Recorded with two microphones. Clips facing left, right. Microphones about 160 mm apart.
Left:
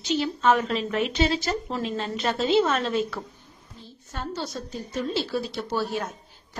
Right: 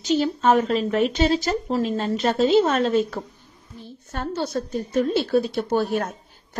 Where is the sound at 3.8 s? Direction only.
55° right (ahead or behind).